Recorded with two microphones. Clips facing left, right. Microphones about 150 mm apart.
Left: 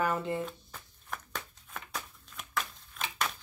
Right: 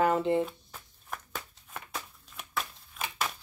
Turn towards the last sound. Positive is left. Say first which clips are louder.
# right 1 dB
turn(degrees=-5)  # may be behind; listen again after turning